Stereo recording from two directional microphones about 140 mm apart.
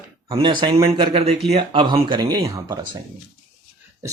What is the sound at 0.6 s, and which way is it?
Speech, 35° right (ahead or behind).